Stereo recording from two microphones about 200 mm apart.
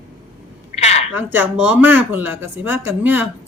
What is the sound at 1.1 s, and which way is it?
Speech, 10° right (ahead or behind).